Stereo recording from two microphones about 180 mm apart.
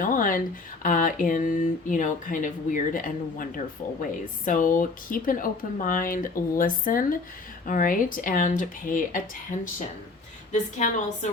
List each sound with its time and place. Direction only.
0.0 s speech: 50° left (ahead or behind)
10.5 s speech: 40° left (ahead or behind)